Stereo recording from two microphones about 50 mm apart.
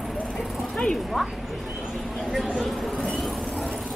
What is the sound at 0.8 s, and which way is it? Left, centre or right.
Speech, centre.